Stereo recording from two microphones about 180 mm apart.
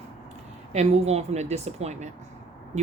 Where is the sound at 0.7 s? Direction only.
35° right (ahead or behind).